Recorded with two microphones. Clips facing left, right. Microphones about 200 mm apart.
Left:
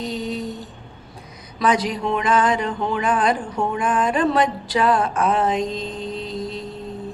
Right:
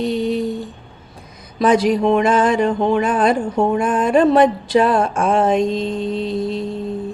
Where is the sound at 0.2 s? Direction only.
55° right (ahead or behind).